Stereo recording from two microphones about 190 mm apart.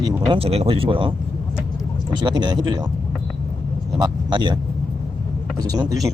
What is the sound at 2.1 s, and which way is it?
Speech, 25° right (ahead or behind).